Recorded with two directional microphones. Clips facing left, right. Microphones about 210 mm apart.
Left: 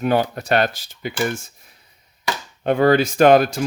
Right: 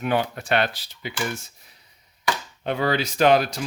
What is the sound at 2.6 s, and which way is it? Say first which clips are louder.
Speech: left 8 dB; 50° left (ahead or behind).